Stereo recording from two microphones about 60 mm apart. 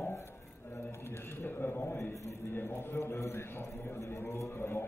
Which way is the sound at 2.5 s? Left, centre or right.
Left.